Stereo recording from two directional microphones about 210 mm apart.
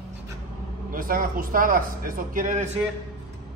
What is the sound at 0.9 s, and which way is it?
A man's voice, 45° right (ahead or behind).